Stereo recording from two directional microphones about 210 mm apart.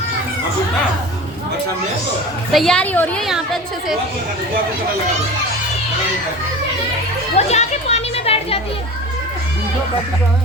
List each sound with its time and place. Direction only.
2.5 s a woman's voice: centre (ahead or behind)
7.3 s music: 30° left (ahead or behind)